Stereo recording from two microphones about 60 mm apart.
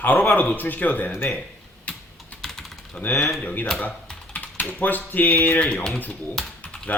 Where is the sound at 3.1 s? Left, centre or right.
Centre.